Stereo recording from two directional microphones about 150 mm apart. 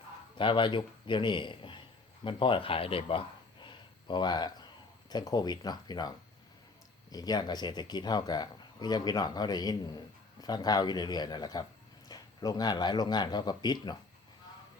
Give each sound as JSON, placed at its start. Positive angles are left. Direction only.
{"t": 0.3, "sound": "a man's voice", "side_deg": 35}